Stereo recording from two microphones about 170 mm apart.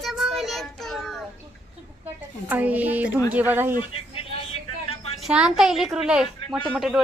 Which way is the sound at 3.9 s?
35° left (ahead or behind).